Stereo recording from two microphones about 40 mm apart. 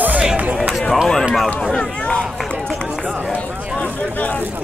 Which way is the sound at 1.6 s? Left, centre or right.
Left.